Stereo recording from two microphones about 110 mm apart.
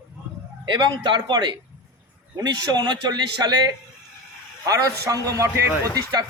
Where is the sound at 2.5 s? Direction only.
40° right (ahead or behind).